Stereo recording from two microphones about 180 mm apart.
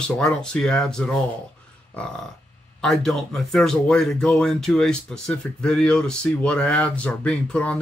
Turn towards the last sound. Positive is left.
turn(degrees=5)  # may be behind; listen again after turning